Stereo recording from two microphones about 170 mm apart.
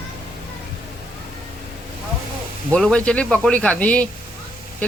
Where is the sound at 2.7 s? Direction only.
5° left (ahead or behind).